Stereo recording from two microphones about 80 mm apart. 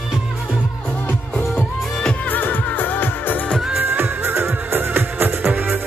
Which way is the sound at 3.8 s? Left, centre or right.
Right.